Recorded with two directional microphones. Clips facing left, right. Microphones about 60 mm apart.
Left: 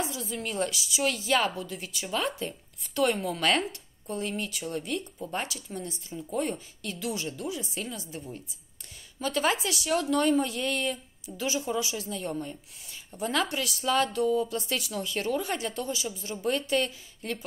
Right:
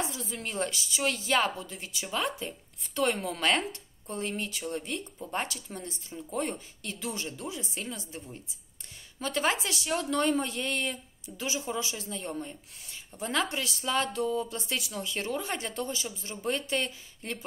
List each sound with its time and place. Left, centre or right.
0.0 s a woman's voice: right